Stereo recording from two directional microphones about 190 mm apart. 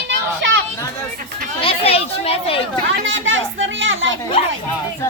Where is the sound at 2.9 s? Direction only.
85° right.